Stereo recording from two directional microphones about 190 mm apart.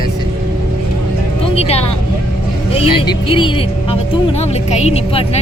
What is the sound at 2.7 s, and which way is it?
Speech, 30° left (ahead or behind).